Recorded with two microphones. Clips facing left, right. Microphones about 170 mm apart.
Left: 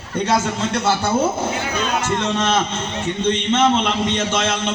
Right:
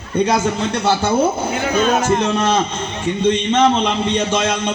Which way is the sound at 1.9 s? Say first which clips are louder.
Right 5 dB; 45° right (ahead or behind).